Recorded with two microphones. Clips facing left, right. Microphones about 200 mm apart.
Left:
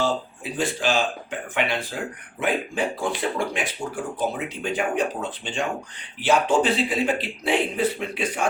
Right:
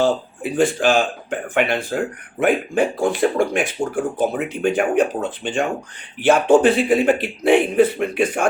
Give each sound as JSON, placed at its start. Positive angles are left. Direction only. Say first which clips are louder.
{"t": 0.0, "sound": "speech", "louder": "right 6 dB", "side_deg": -50}